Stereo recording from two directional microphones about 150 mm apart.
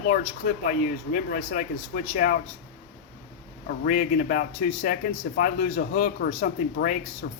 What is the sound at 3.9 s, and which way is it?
Speech, 60° left (ahead or behind).